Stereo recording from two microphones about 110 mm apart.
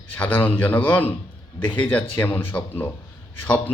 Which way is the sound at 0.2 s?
15° left (ahead or behind).